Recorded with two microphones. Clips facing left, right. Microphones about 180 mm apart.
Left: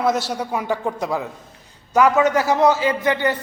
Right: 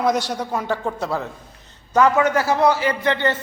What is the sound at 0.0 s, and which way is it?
A man's voice, 5° left (ahead or behind).